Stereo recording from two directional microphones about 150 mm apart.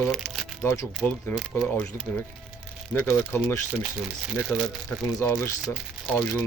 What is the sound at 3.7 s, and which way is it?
Speech, 5° right (ahead or behind).